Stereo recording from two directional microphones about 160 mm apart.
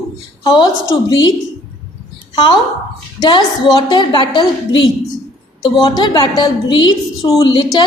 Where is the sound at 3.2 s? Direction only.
25° left (ahead or behind).